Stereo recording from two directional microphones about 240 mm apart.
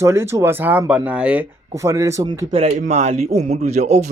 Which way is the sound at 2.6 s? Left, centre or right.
Right.